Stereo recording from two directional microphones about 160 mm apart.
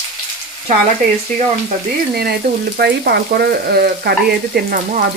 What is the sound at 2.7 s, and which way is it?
Frying, 85° right.